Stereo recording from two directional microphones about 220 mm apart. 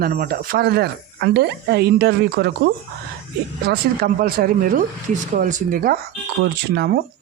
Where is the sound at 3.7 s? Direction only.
45° right (ahead or behind).